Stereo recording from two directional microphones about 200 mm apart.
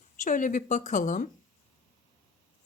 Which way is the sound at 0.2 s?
40° left (ahead or behind).